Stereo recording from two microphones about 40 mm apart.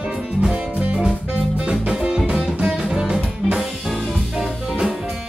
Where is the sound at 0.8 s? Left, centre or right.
Right.